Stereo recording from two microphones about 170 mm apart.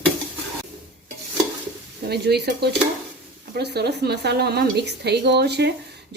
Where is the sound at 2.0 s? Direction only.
70° right (ahead or behind).